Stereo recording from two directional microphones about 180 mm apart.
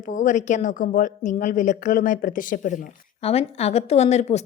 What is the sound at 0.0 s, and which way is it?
A woman's voice, 45° left (ahead or behind).